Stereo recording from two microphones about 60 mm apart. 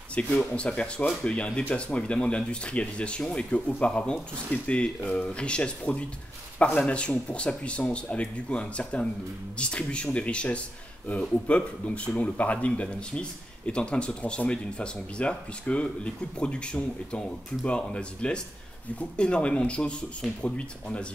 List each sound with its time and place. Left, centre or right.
0.1 s speech: left